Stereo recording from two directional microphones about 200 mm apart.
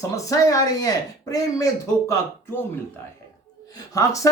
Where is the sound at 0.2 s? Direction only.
15° left (ahead or behind).